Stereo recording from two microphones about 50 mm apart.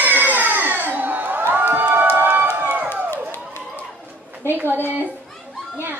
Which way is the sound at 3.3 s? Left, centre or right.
Left.